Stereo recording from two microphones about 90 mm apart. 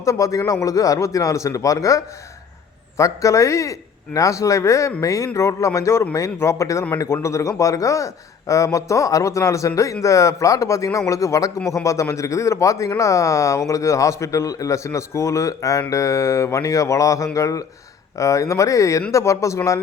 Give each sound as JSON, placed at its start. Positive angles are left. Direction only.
{"t": 0.0, "sound": "a man's voice", "side_deg": 35}